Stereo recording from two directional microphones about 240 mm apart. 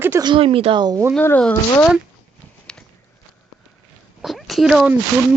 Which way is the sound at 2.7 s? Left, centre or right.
Centre.